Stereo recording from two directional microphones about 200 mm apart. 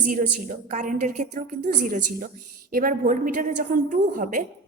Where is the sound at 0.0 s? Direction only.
40° right (ahead or behind).